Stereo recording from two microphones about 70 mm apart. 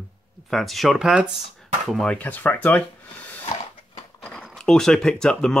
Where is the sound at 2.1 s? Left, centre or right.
Left.